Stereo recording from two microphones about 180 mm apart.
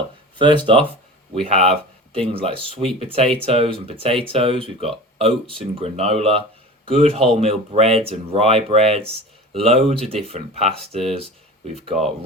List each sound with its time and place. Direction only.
0.3 s speech: 25° right (ahead or behind)